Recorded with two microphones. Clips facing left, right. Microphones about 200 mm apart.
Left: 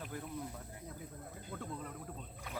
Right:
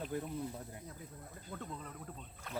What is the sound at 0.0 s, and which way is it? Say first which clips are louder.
Speech: right 5 dB; 25° right (ahead or behind).